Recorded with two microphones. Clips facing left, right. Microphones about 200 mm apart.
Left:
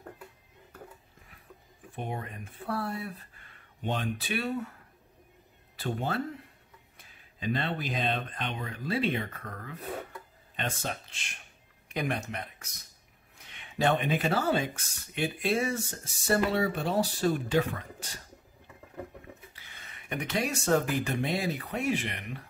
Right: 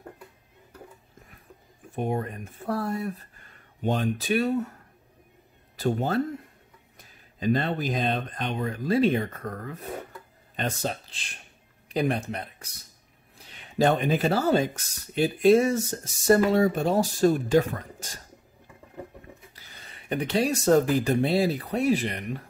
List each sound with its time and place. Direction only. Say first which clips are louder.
2.0 s speech: right 8 dB; 45° right (ahead or behind)
5.8 s speech: right 7 dB; 40° right (ahead or behind)
19.5 s speech: right 3 dB; 35° right (ahead or behind)